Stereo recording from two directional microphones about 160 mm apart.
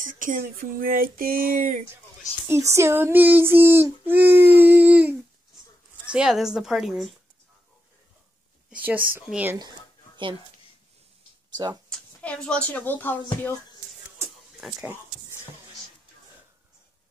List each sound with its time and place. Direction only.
0.0 s speech: 55° right (ahead or behind)
2.4 s child singing: 15° right (ahead or behind)
6.0 s a woman's voice: 5° right (ahead or behind)
8.6 s speech: 10° right (ahead or behind)
9.1 s child singing: 10° right (ahead or behind)
9.6 s a sound: 30° right (ahead or behind)
11.5 s speech: 25° right (ahead or behind)
12.2 s a woman's voice: 5° left (ahead or behind)